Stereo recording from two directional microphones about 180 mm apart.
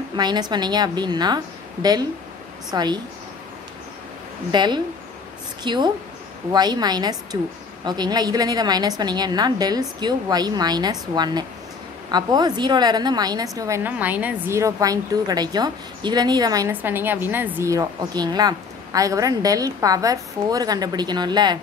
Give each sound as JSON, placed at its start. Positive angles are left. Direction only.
{"t": 0.1, "sound": "a woman's voice", "side_deg": -25}
{"t": 4.5, "sound": "a woman's voice", "side_deg": -25}